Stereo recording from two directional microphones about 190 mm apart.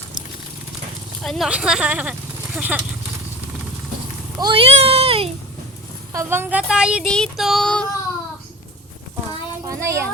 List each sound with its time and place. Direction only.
1.2 s child singing: centre (ahead or behind)
2.6 s speech: 5° right (ahead or behind)
4.4 s a child's voice: 25° right (ahead or behind)
6.1 s child singing: 10° right (ahead or behind); by 7.9 s 5° left (ahead or behind)
9.6 s speech: 15° right (ahead or behind)